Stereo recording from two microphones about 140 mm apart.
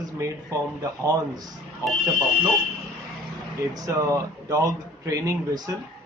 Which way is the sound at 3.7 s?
25° right (ahead or behind).